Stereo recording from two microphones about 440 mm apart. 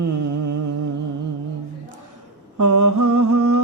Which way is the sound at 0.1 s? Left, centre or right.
Right.